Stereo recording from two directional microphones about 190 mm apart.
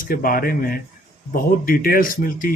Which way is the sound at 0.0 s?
50° left (ahead or behind).